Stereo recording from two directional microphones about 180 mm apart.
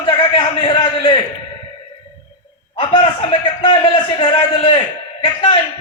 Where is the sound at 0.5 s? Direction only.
25° left (ahead or behind).